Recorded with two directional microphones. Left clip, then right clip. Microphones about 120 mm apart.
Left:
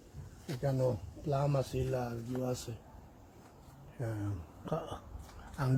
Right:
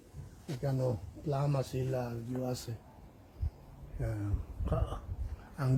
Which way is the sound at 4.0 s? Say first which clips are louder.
Even; 5° right (ahead or behind).